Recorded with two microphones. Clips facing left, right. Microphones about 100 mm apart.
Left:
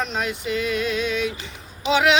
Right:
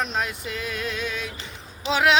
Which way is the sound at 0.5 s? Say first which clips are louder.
Left 8 dB; 85° left.